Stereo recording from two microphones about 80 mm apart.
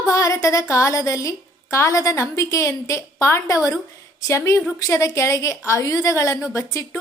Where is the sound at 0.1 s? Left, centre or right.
Left.